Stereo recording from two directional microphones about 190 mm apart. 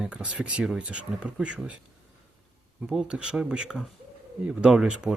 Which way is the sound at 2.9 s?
5° right (ahead or behind).